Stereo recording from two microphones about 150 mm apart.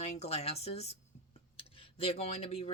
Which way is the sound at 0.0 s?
45° left (ahead or behind).